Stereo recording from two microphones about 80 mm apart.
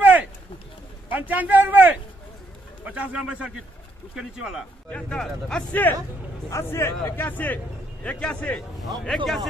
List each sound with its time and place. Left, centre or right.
0.0 s a sound: right
1.1 s a man's voice: right
4.8 s speech: centre
5.7 s speech: left
6.5 s speech: left
7.2 s speech: left; by 9.5 s centre